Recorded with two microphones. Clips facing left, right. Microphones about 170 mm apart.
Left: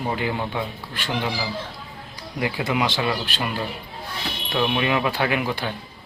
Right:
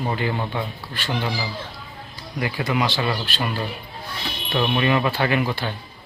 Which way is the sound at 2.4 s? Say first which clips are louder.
Even; 10° left (ahead or behind).